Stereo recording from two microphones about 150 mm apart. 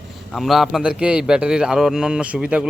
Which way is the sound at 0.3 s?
Centre (ahead or behind).